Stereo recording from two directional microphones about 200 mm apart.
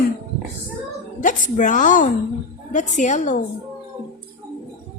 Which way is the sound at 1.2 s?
40° left (ahead or behind).